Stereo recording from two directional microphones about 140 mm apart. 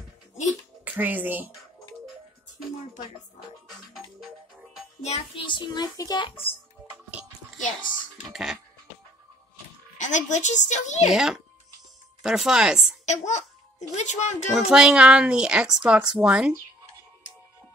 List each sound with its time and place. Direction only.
0.8 s speech: 15° right (ahead or behind)
3.7 s music: centre (ahead or behind)
5.3 s a child's voice: 35° left (ahead or behind)
7.5 s speech: 65° left (ahead or behind)
8.3 s a child's voice: centre (ahead or behind)
9.9 s a woman's voice: 60° left (ahead or behind)
12.2 s a child's voice: 5° right (ahead or behind)
13.0 s a child's voice: 55° left (ahead or behind)
14.5 s a child's voice: 5° right (ahead or behind)